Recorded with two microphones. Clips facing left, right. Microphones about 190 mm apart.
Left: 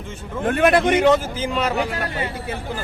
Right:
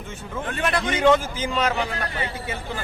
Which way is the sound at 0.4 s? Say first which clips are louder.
Left 9 dB; 55° left (ahead or behind).